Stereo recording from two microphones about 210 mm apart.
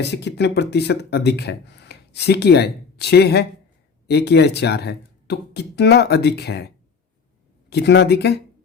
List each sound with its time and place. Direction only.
0.0 s speech: 55° left (ahead or behind)
7.7 s speech: 55° left (ahead or behind)